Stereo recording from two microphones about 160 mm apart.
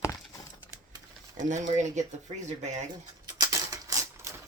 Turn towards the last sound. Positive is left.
turn(degrees=-20)  # may be behind; listen again after turning